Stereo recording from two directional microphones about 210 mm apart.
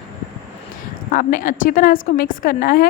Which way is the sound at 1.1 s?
40° left (ahead or behind).